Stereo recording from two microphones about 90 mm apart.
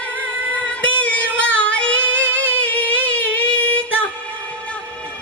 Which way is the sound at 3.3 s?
15° left (ahead or behind).